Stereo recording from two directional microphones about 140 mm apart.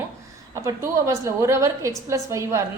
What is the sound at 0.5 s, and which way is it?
A woman's voice, 20° right (ahead or behind).